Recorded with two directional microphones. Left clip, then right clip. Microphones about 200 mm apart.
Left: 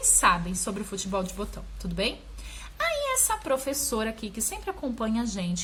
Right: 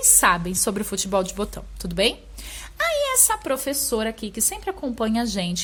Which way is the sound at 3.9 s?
30° right (ahead or behind).